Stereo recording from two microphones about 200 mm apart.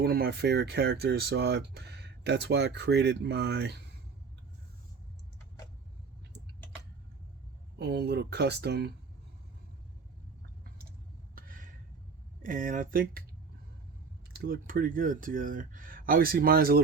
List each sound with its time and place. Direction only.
0.0 s speech: 50° right (ahead or behind)
7.8 s speech: 55° right (ahead or behind)
11.3 s a sound: 45° right (ahead or behind)
12.4 s speech: 40° right (ahead or behind)
14.3 s speech: 45° right (ahead or behind)